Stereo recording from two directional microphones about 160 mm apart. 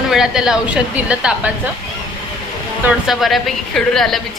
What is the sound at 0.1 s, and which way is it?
A woman's voice, 5° right (ahead or behind).